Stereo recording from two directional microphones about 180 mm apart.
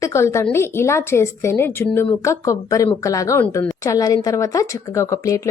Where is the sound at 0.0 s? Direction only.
15° left (ahead or behind).